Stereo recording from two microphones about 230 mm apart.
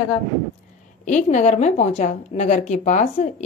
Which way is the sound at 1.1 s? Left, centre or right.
Left.